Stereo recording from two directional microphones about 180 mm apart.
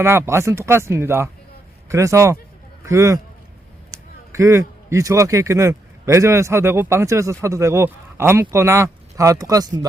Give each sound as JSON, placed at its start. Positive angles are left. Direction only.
{"t": 0.0, "sound": "speech", "side_deg": -15}
{"t": 4.3, "sound": "a man's voice", "side_deg": -15}